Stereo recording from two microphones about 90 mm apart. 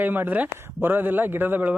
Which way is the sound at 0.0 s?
20° right (ahead or behind).